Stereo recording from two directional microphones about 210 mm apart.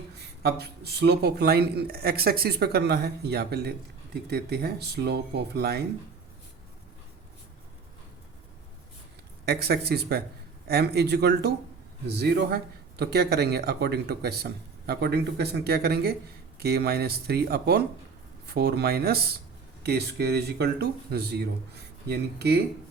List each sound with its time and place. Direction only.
0.2 s speech: 50° right (ahead or behind)
9.5 s speech: 50° right (ahead or behind)